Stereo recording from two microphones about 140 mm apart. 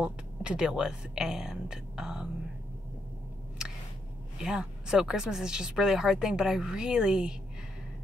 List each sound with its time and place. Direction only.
0.0 s speech: 5° right (ahead or behind)
4.4 s speech: 5° right (ahead or behind)